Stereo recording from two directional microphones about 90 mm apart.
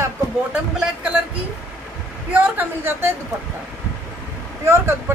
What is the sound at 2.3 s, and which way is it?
Speech, 25° right (ahead or behind).